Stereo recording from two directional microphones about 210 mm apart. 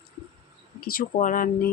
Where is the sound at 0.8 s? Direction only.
45° left (ahead or behind).